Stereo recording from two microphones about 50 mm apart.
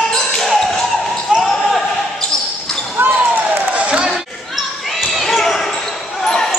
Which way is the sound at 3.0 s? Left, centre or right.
Right.